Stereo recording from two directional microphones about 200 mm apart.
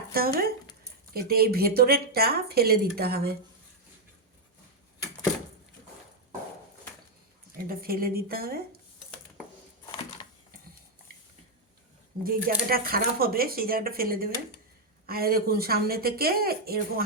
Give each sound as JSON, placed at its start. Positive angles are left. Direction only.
{"t": 0.1, "sound": "speech", "side_deg": -45}
{"t": 7.7, "sound": "speech", "side_deg": -45}
{"t": 12.2, "sound": "speech", "side_deg": -45}